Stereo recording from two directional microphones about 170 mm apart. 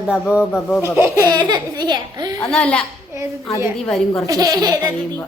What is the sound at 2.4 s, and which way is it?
A child's voice, 5° left (ahead or behind).